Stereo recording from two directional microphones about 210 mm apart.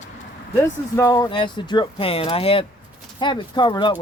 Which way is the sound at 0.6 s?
15° left (ahead or behind).